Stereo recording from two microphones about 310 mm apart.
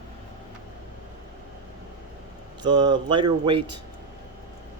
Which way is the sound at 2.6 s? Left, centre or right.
Centre.